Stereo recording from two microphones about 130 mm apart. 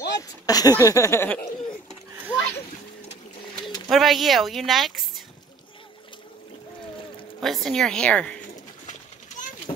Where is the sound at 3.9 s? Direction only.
Centre (ahead or behind).